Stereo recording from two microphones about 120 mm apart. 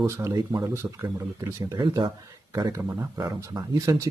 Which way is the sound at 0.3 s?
35° right (ahead or behind).